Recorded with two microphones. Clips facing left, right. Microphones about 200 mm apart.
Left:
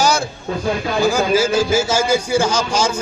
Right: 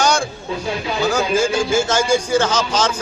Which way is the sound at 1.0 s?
10° left (ahead or behind).